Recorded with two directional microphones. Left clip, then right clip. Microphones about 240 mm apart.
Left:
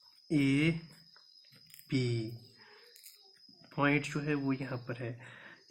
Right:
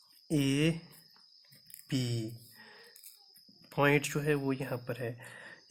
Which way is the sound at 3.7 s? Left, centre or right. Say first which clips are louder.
Right 3 dB; right.